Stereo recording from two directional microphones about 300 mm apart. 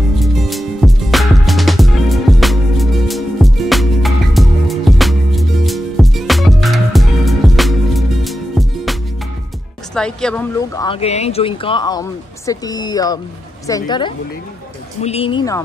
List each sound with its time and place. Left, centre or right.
0.2 s music: centre
9.9 s speech: centre